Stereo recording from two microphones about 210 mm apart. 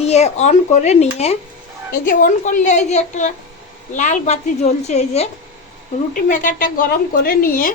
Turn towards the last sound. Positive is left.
turn(degrees=40)  # may be behind; listen again after turning